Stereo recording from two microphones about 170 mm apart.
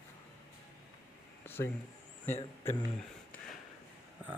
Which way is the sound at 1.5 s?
15° left (ahead or behind).